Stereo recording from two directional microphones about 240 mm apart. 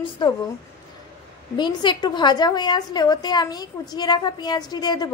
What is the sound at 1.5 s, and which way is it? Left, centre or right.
A woman's voice, centre.